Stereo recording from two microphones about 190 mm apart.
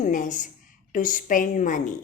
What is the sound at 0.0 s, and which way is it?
Speech, 40° left (ahead or behind).